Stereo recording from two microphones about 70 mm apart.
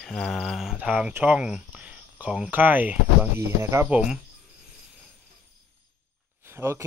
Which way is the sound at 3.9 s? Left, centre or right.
Centre.